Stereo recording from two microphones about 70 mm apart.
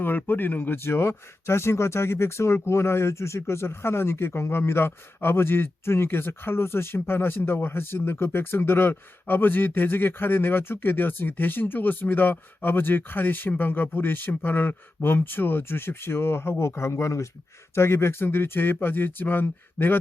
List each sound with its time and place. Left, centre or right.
0.0 s speech: left